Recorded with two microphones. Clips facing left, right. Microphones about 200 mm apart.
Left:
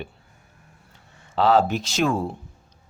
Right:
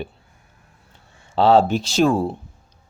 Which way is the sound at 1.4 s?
30° right (ahead or behind).